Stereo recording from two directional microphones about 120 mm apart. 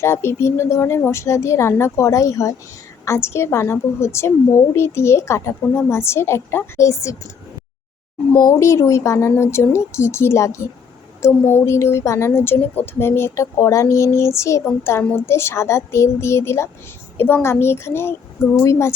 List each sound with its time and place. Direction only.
0.0 s a woman's voice: 20° left (ahead or behind)
8.4 s a woman's voice: 25° left (ahead or behind)